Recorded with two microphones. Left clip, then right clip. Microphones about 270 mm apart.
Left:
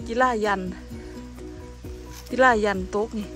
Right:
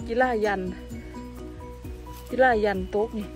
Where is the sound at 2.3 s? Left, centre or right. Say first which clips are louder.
Left 2 dB; centre.